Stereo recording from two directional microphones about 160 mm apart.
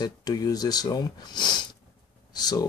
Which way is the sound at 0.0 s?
25° left (ahead or behind).